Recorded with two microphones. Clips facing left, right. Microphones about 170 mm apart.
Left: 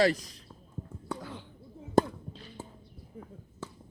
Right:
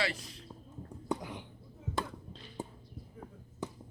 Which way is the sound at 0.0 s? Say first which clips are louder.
Left 10 dB; 40° left (ahead or behind).